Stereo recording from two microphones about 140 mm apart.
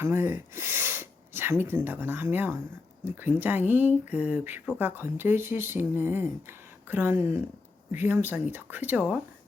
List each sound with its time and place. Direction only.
0.0 s speech: 15° right (ahead or behind)